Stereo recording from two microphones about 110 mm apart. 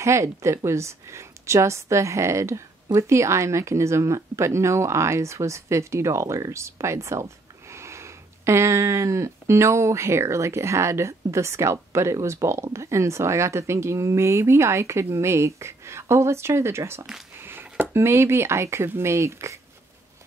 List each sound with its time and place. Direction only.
0.0 s speech: 25° right (ahead or behind)